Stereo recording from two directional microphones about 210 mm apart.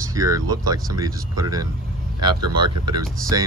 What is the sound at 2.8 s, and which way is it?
Speech, 20° right (ahead or behind).